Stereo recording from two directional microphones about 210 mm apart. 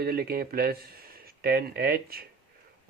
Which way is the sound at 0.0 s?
45° right (ahead or behind).